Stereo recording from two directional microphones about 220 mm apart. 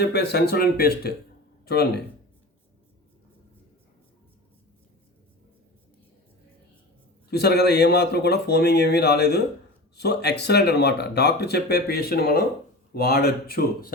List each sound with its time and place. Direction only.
0.0 s speech: 50° left (ahead or behind)
7.3 s speech: 45° left (ahead or behind)